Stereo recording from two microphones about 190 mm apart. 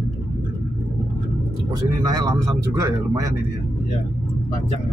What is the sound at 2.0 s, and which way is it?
Speech, 20° right (ahead or behind).